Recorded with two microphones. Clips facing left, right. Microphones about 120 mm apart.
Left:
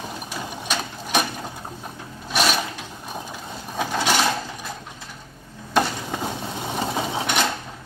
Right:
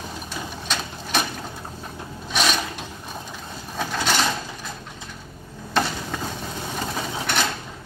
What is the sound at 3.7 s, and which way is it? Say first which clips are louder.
Mechanisms: left 2 dB; 10° left (ahead or behind).